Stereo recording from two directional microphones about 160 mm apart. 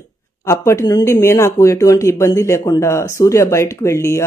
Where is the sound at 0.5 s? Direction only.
20° left (ahead or behind).